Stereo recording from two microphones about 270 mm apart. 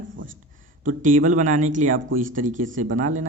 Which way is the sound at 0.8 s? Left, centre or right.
Right.